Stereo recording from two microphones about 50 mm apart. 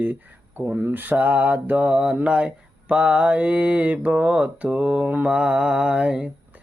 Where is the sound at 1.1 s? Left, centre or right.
Right.